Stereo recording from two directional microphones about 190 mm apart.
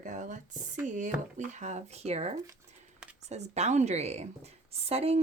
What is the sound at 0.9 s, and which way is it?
Speech, 40° right (ahead or behind).